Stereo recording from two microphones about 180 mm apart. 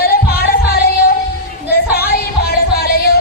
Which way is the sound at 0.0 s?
60° left (ahead or behind).